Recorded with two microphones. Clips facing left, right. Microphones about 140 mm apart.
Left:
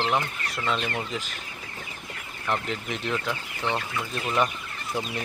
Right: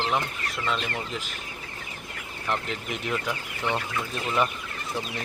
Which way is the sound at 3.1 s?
15° right (ahead or behind).